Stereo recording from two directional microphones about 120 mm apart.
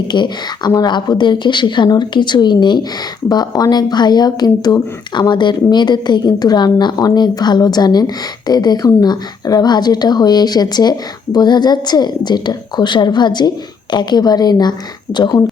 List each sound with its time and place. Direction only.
0.1 s speech: 40° left (ahead or behind)